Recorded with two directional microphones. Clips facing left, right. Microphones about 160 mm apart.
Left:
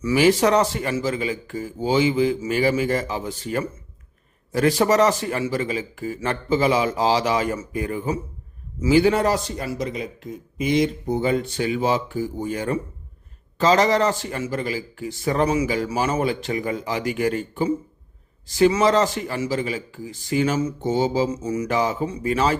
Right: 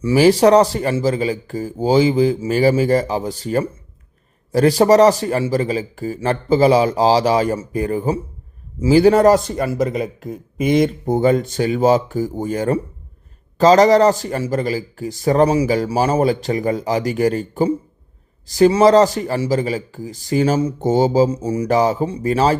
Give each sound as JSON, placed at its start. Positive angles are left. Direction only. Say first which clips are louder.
{"t": 0.0, "sound": "a man's voice", "louder": "right 5 dB", "side_deg": -35}